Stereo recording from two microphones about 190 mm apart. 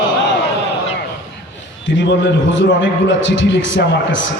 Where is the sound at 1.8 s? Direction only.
75° left (ahead or behind).